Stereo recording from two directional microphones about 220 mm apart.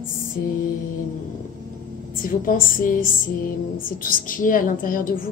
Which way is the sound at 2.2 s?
40° left (ahead or behind).